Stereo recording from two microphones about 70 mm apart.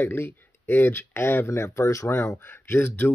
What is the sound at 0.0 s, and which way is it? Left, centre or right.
Speech, left.